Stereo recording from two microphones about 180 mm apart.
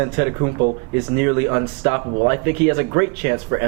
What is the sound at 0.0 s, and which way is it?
Speech, 20° right (ahead or behind).